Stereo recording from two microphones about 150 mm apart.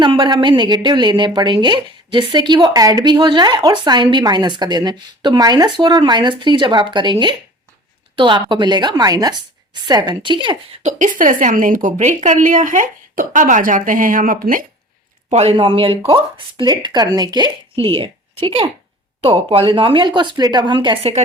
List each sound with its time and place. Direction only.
0.0 s a woman's voice: 30° right (ahead or behind)
10.8 s a woman's voice: 55° right (ahead or behind)
15.3 s a woman's voice: 45° right (ahead or behind)